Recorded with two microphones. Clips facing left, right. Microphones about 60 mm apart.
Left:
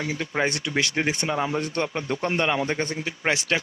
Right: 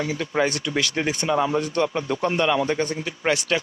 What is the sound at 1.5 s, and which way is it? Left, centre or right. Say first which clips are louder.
A man's voice: right 4 dB; left.